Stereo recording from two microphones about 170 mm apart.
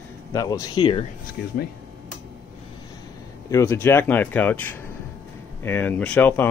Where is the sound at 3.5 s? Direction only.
15° left (ahead or behind).